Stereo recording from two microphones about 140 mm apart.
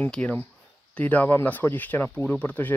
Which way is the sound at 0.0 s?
10° left (ahead or behind).